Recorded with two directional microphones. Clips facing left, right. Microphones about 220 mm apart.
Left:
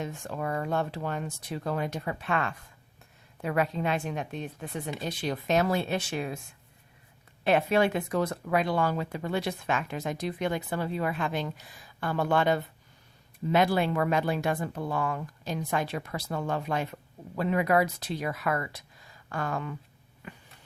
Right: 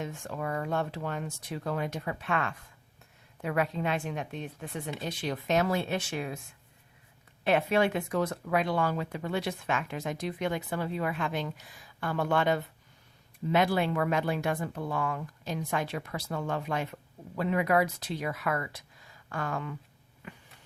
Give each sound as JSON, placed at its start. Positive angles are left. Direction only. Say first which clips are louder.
{"t": 0.0, "sound": "speech", "louder": "left 2 dB", "side_deg": 35}
{"t": 7.4, "sound": "speech", "louder": "left 2 dB", "side_deg": 35}